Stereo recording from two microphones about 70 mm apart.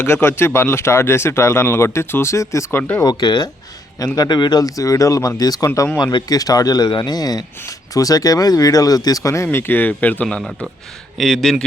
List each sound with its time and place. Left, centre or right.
0.0 s speech: left
2.7 s speech: left
3.0 s speech: left
4.0 s speech: left
6.0 s a man's voice: left
10.2 s speech: centre